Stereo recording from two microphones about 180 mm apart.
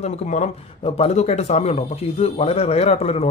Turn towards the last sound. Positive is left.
turn(degrees=35)  # may be behind; listen again after turning